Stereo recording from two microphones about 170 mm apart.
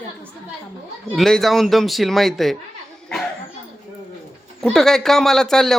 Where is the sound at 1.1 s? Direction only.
Centre (ahead or behind).